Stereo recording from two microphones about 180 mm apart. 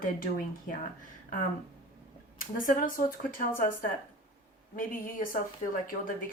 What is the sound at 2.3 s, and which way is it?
A woman's voice, 50° left (ahead or behind).